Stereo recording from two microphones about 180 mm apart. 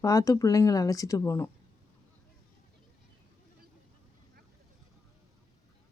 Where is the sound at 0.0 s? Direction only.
20° left (ahead or behind).